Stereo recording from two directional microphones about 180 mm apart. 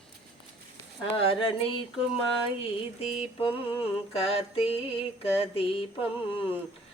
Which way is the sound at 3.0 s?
35° left (ahead or behind).